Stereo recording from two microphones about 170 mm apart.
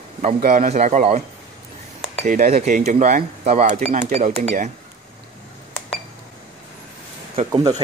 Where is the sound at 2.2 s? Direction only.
55° right (ahead or behind).